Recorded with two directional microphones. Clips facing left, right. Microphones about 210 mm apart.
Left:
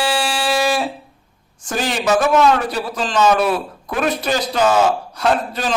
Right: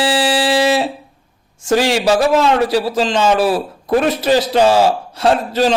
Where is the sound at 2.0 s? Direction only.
30° right (ahead or behind).